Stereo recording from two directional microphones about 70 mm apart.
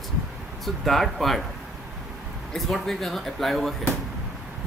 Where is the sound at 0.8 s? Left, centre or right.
Centre.